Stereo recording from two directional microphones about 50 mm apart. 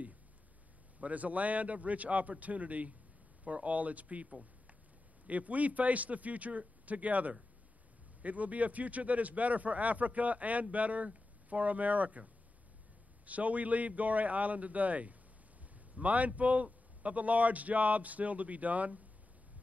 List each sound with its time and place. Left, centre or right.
1.0 s speech: right